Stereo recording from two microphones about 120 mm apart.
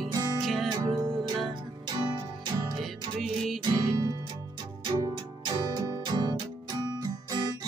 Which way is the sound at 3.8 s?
35° right (ahead or behind).